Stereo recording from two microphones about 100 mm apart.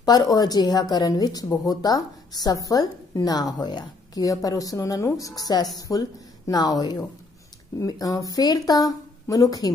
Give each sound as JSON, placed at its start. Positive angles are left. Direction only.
{"t": 0.0, "sound": "a woman's voice", "side_deg": 40}